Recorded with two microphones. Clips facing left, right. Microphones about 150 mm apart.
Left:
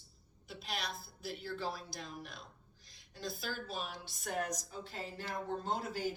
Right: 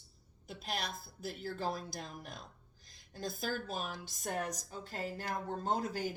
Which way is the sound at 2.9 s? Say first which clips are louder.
Right 2 dB; 50° right (ahead or behind).